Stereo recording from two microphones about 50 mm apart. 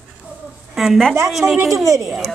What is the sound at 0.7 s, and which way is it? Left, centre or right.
Speech, centre.